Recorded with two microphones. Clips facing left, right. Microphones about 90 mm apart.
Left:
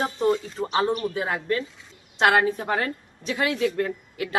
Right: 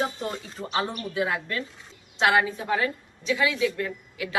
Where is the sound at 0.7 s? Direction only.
30° left (ahead or behind).